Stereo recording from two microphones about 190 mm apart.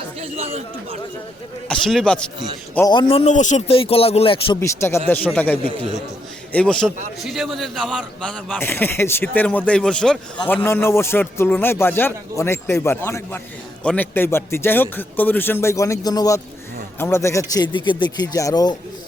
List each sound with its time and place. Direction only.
0.2 s speech: 30° right (ahead or behind)
1.6 s speech: centre (ahead or behind)
2.7 s a man's voice: 20° left (ahead or behind)
4.6 s a man's voice: 15° left (ahead or behind)
8.6 s a man's voice: 10° left (ahead or behind)